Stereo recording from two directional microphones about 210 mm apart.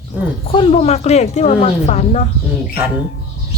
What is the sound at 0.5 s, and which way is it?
A woman's voice, 25° left (ahead or behind).